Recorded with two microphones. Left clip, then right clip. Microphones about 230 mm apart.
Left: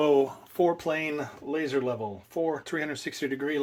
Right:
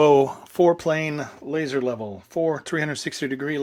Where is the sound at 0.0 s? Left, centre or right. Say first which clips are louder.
Right 7 dB; right.